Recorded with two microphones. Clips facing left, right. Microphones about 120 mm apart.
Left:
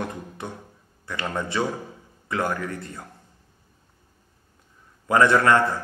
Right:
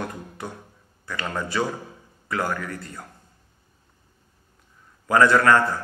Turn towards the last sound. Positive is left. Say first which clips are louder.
# right 1 dB
turn(degrees=20)  # may be behind; listen again after turning